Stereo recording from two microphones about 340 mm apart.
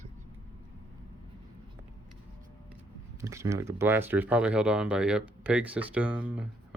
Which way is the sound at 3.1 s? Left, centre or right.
Centre.